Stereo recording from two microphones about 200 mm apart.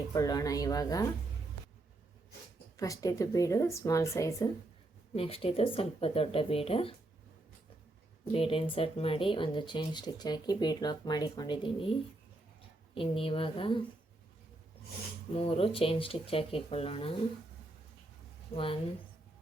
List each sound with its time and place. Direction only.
0.1 s speech: 20° left (ahead or behind)
2.7 s speech: 15° left (ahead or behind)
5.1 s speech: 30° left (ahead or behind)
8.2 s speech: 25° left (ahead or behind)
15.3 s speech: 30° left (ahead or behind)
18.5 s speech: 25° left (ahead or behind)